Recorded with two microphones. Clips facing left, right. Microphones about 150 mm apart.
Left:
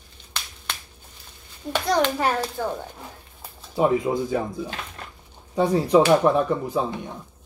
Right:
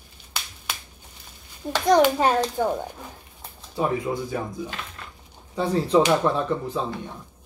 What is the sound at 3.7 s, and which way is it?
Speech, 20° left (ahead or behind).